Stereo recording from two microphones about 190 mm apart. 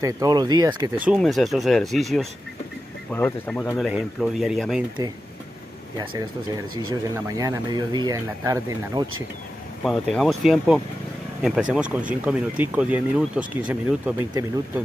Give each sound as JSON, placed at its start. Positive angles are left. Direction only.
{"t": 0.0, "sound": "speech", "side_deg": -20}
{"t": 0.9, "sound": "speech", "side_deg": -5}
{"t": 6.9, "sound": "speech", "side_deg": -20}
{"t": 9.8, "sound": "speech", "side_deg": 0}